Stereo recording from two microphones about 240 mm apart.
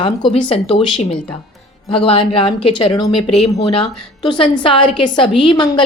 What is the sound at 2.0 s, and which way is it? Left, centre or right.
Speech, left.